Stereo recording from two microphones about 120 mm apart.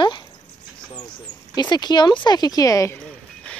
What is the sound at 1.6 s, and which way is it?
Speech, 35° left (ahead or behind).